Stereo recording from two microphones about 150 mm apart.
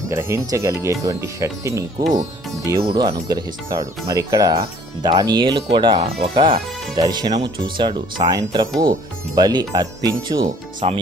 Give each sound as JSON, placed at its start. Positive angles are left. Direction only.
{"t": 0.1, "sound": "speech", "side_deg": -20}
{"t": 2.8, "sound": "speech", "side_deg": -35}
{"t": 10.8, "sound": "speech", "side_deg": -40}